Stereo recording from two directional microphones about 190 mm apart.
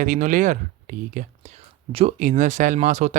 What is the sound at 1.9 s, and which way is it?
Speech, 30° right (ahead or behind).